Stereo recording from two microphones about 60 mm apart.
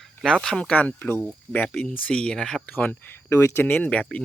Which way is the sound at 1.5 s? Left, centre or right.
Right.